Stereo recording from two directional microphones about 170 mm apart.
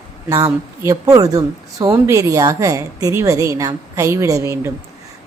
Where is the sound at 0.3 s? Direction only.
20° right (ahead or behind).